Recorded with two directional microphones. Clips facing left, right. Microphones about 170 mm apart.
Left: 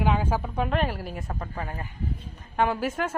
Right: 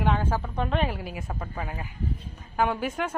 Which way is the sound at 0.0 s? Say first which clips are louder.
Left 1 dB; 10° left (ahead or behind).